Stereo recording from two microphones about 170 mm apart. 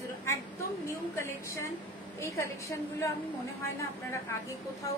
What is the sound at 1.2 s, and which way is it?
A woman's voice, 15° left (ahead or behind).